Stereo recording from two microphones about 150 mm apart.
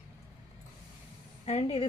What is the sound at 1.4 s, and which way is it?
Speech, 40° left (ahead or behind).